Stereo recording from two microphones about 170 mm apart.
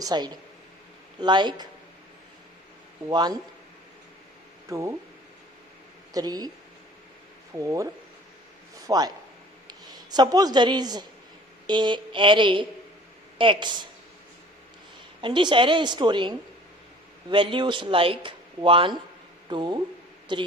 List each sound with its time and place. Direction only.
0.0 s speech: 25° right (ahead or behind)
3.1 s speech: 25° right (ahead or behind)
4.7 s speech: 20° right (ahead or behind)
6.1 s speech: 25° right (ahead or behind)
7.6 s speech: 20° right (ahead or behind)
8.9 s a man's voice: 25° right (ahead or behind)
15.2 s speech: 25° right (ahead or behind)